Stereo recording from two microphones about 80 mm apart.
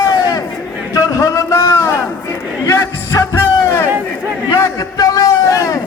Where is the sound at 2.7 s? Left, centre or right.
Left.